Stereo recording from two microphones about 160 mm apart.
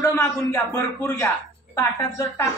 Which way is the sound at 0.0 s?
15° left (ahead or behind).